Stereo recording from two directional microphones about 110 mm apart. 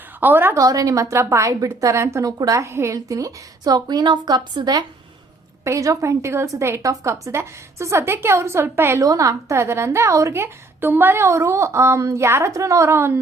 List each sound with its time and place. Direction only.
0.2 s a woman's voice: 20° right (ahead or behind)
0.6 s a woman's voice: 30° right (ahead or behind)
5.6 s a woman's voice: 30° right (ahead or behind)